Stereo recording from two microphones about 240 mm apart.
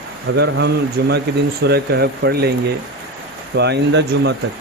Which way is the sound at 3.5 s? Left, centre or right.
Right.